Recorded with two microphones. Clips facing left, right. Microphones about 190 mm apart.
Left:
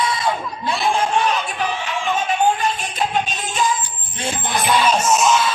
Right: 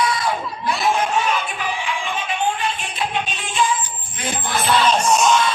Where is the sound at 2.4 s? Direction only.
40° left (ahead or behind).